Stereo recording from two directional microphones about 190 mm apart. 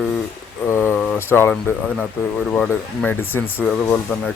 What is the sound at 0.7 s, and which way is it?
Mantra, 10° left (ahead or behind).